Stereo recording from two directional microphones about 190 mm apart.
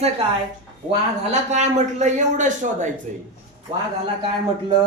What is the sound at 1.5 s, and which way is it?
Speech, 40° right (ahead or behind).